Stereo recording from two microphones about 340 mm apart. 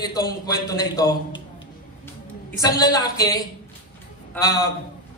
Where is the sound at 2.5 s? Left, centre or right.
Centre.